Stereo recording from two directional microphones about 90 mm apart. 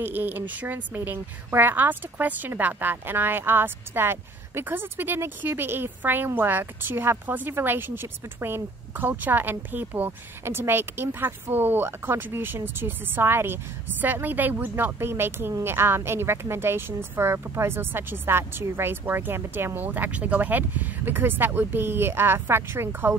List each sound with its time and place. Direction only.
0.0 s a woman's voice: 20° right (ahead or behind)